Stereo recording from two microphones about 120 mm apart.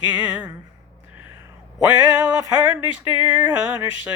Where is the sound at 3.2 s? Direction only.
15° right (ahead or behind).